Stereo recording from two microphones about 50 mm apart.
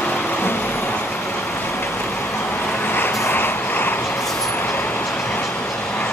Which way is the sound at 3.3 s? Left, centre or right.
Left.